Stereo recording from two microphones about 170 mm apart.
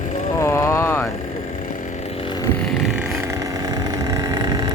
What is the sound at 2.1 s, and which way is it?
Vehicle, 35° left (ahead or behind).